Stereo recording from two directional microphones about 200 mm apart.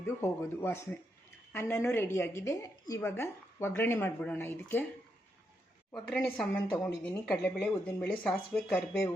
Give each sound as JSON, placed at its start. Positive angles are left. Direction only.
{"t": 0.2, "sound": "a woman's voice", "side_deg": 10}
{"t": 6.1, "sound": "a woman's voice", "side_deg": 5}